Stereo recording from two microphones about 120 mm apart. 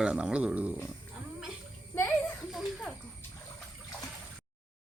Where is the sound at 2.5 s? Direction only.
Centre (ahead or behind).